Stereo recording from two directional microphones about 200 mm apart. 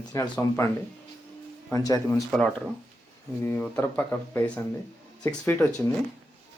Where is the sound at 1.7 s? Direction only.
15° left (ahead or behind).